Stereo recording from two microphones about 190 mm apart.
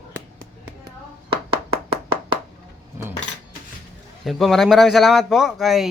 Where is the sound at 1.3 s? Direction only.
30° right (ahead or behind).